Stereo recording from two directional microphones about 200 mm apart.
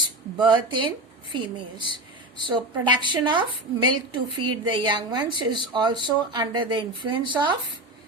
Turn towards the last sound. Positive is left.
turn(degrees=-25)  # may be behind; listen again after turning